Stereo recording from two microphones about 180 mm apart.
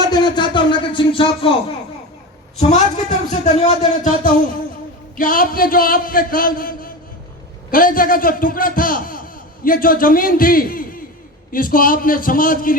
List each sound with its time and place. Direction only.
0.0 s speech: 25° left (ahead or behind)
2.6 s a man's voice: 40° left (ahead or behind)